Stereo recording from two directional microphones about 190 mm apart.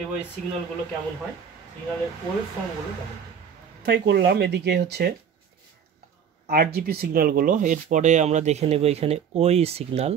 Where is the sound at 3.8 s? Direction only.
60° right (ahead or behind).